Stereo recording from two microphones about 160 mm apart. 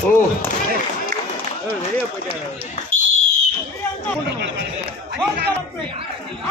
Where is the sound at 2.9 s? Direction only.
50° left (ahead or behind).